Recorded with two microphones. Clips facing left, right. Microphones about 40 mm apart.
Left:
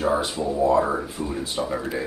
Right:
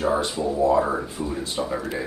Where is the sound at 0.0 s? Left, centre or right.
Centre.